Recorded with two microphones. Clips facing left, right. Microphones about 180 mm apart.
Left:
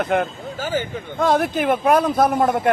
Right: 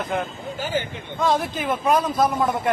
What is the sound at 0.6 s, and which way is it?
A man's voice, 45° left (ahead or behind).